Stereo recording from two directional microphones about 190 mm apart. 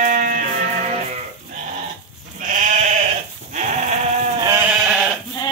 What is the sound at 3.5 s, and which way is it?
Sheep, 40° right (ahead or behind).